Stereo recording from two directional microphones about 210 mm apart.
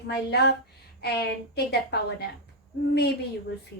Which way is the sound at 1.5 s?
50° left (ahead or behind).